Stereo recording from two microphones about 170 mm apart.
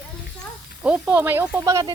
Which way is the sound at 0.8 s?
10° right (ahead or behind).